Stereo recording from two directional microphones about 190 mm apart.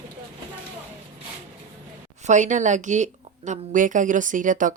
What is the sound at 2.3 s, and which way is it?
A woman's voice, 40° right (ahead or behind).